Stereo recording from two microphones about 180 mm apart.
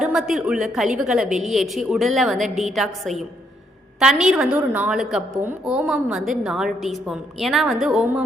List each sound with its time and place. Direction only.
0.0 s a woman's voice: centre (ahead or behind)